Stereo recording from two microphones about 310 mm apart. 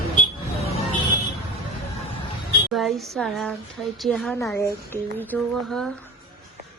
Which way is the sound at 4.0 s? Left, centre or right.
Centre.